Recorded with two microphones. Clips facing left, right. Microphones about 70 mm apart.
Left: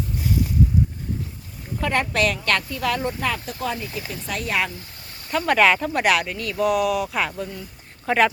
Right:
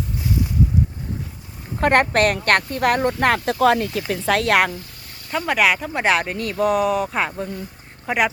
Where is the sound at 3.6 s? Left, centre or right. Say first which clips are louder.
Right 12 dB; right.